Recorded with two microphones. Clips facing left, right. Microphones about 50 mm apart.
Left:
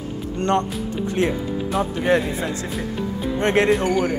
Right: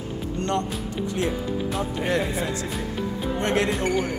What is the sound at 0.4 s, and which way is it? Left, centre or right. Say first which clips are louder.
Speech: left 6 dB; left.